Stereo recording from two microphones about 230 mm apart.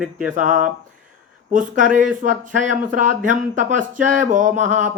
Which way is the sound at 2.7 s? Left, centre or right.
Right.